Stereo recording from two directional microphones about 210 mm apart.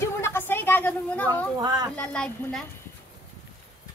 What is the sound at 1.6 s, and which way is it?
Speech, 20° right (ahead or behind).